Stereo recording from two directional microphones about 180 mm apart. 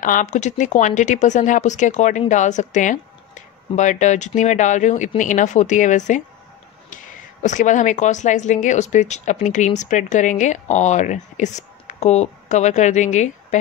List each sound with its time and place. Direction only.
0.0 s speech: 45° left (ahead or behind)
7.4 s speech: 45° left (ahead or behind)